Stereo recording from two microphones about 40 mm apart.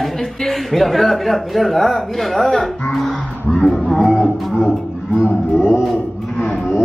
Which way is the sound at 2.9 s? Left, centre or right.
Centre.